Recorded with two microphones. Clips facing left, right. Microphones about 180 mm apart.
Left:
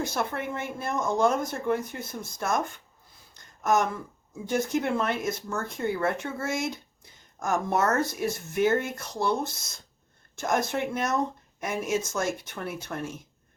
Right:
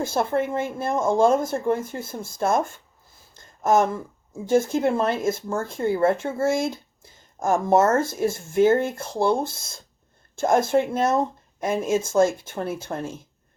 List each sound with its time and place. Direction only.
0.0 s speech: 25° right (ahead or behind)
3.3 s a sound: 25° right (ahead or behind)
4.4 s speech: 25° right (ahead or behind)